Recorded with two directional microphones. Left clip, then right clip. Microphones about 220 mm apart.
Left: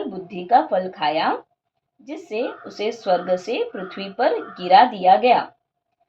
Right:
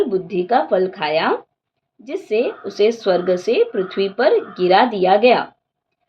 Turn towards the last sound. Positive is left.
turn(degrees=-50)  # may be behind; listen again after turning